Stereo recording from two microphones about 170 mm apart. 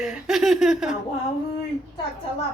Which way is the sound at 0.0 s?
5° right (ahead or behind).